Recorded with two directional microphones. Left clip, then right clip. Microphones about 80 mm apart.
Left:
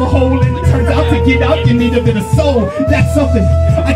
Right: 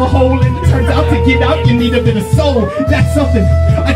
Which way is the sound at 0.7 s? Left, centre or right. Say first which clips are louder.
Even; right.